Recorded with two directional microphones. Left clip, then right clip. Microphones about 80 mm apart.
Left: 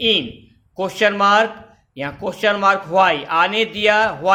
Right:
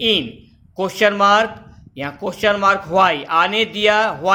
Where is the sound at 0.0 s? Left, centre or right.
Right.